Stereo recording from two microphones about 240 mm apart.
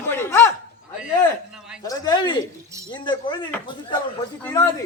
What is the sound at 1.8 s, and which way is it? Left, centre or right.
Speech, centre.